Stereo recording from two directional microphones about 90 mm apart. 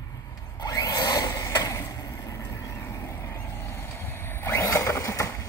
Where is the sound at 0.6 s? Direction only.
50° left (ahead or behind).